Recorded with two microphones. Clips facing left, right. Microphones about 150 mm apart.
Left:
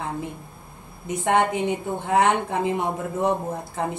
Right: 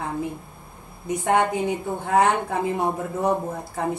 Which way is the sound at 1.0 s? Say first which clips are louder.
Even; 20° left (ahead or behind).